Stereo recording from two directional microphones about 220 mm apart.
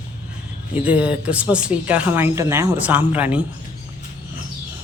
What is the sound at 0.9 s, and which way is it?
Speech, 5° right (ahead or behind).